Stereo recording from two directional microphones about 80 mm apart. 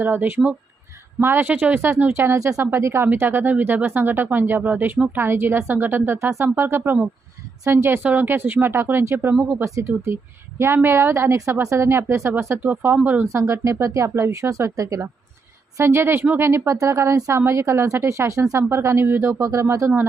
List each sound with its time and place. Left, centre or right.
0.0 s speech: right
9.3 s speech: centre
9.6 s speech: right
13.2 s speech: right
15.8 s speech: right